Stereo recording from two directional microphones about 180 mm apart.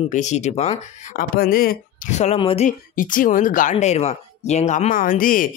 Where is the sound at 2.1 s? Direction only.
40° left (ahead or behind).